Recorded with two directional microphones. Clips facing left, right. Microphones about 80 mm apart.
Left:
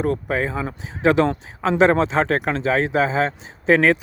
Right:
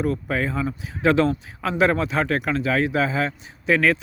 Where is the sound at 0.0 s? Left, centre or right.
Left.